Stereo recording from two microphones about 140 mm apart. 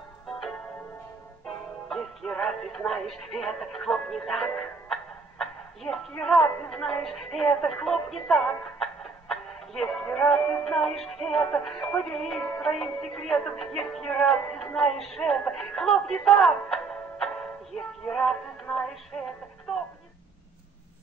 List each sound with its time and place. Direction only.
0.3 s music: 5° left (ahead or behind)
1.4 s speech: 5° left (ahead or behind)
10.6 s music: 5° left (ahead or behind)